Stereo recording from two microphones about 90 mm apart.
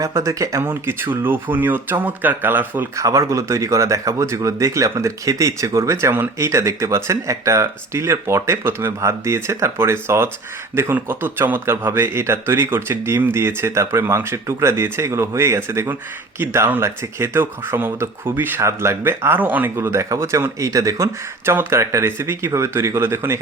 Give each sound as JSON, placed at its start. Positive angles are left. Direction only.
{"t": 0.0, "sound": "speech", "side_deg": -35}
{"t": 0.6, "sound": "speech", "side_deg": -25}
{"t": 2.9, "sound": "speech", "side_deg": -40}
{"t": 21.4, "sound": "speech", "side_deg": -25}